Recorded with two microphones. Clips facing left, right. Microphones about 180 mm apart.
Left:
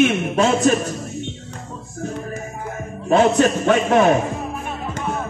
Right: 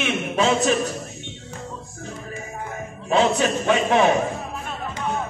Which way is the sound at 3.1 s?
50° left (ahead or behind).